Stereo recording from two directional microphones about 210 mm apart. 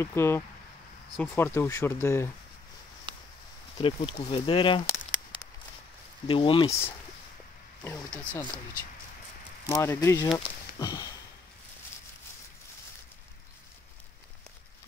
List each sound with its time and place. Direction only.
0.0 s speech: 10° left (ahead or behind)
3.1 s a sound: 25° right (ahead or behind)
3.7 s speech: 25° left (ahead or behind)
6.2 s speech: 25° left (ahead or behind)
8.2 s speech: 5° left (ahead or behind)
9.7 s speech: 15° left (ahead or behind)
10.8 s sniff: 15° left (ahead or behind)